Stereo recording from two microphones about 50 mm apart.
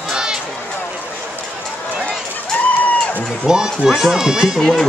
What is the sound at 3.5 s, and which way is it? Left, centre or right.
Speech, centre.